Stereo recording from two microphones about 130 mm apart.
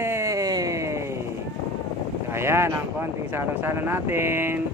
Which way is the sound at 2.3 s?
20° right (ahead or behind).